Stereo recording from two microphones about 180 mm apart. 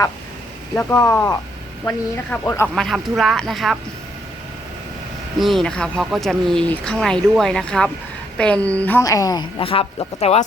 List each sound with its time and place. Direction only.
0.8 s a woman's voice: 15° left (ahead or behind)
2.7 s speech: centre (ahead or behind)
5.4 s a woman's voice: centre (ahead or behind); by 10.4 s 35° left (ahead or behind)